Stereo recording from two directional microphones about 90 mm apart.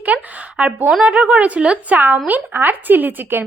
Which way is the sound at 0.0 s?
15° right (ahead or behind).